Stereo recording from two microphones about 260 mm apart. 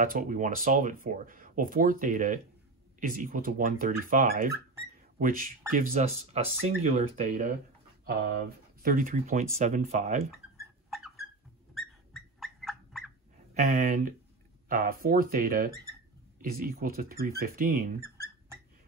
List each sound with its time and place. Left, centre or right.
0.0 s speech: right
8.0 s a sound: right
8.8 s speech: right
10.6 s a sound: centre
11.7 s bird: centre
13.6 s speech: right